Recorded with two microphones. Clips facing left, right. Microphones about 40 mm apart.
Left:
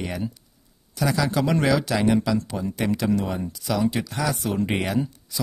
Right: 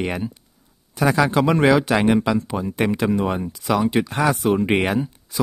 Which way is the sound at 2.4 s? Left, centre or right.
Right.